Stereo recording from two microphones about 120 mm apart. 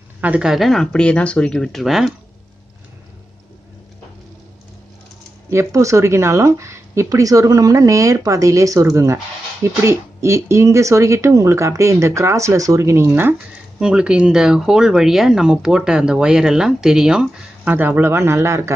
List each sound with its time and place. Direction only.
0.2 s speech: 10° right (ahead or behind)
5.5 s speech: 25° right (ahead or behind)
13.7 s speech: 5° right (ahead or behind)